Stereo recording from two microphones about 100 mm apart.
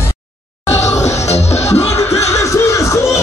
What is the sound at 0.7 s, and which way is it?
Music, 30° left (ahead or behind).